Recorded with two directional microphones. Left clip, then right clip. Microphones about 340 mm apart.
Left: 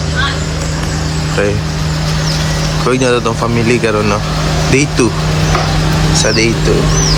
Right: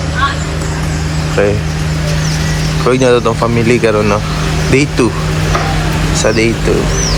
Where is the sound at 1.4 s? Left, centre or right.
Centre.